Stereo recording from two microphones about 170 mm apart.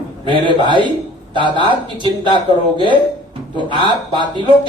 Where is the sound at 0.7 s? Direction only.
30° right (ahead or behind).